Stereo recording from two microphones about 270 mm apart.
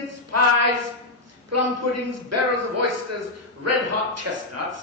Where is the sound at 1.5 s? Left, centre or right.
Right.